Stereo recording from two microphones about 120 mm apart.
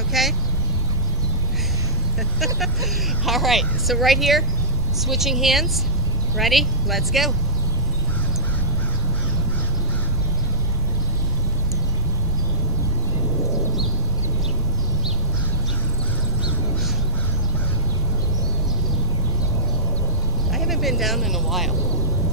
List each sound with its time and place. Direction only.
0.1 s a sound: centre (ahead or behind)
2.4 s speech: centre (ahead or behind)
20.5 s vehicle: centre (ahead or behind)